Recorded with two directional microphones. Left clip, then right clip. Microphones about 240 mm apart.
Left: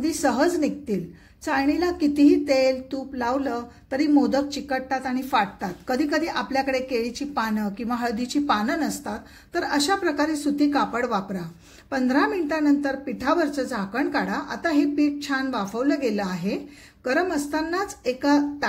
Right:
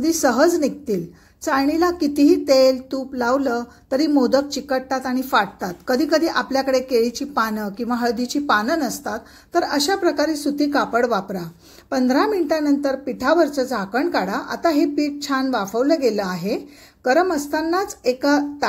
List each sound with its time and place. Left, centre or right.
0.0 s a woman's voice: centre